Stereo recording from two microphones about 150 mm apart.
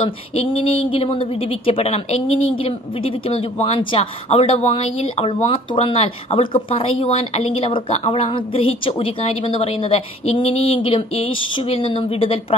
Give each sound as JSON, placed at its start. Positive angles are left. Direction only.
{"t": 0.3, "sound": "a woman's voice", "side_deg": 40}